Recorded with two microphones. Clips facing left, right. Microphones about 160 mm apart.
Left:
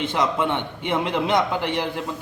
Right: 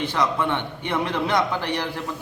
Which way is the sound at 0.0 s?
20° left (ahead or behind).